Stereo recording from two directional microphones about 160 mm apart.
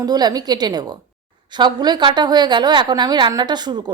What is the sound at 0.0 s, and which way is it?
A woman's voice, 25° right (ahead or behind).